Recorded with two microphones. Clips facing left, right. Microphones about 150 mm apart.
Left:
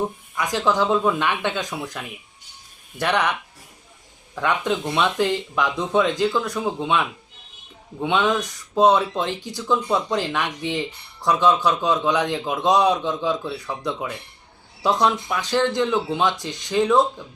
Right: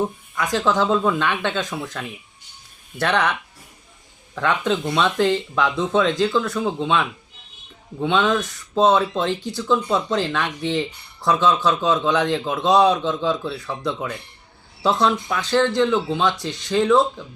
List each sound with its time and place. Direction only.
0.3 s speech: 15° left (ahead or behind)
4.4 s speech: 15° left (ahead or behind)